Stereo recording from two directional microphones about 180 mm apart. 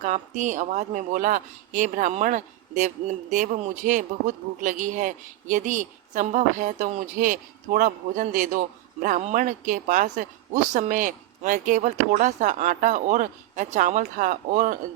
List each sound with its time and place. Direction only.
0.0 s speech: 45° right (ahead or behind)